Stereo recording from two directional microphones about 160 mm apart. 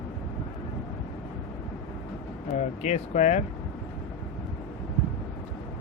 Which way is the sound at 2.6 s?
45° left (ahead or behind).